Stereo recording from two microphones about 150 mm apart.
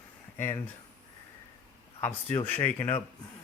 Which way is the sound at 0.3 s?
15° left (ahead or behind).